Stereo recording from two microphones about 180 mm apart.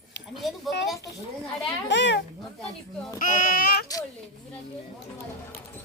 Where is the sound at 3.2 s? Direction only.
45° left (ahead or behind).